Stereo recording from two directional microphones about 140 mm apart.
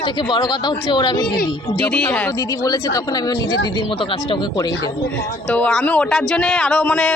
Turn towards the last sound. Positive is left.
turn(degrees=5)  # may be behind; listen again after turning